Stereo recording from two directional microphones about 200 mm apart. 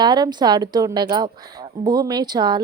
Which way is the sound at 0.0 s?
20° right (ahead or behind).